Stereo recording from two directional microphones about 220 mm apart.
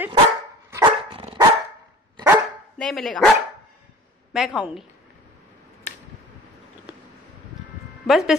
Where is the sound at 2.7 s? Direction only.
Centre (ahead or behind).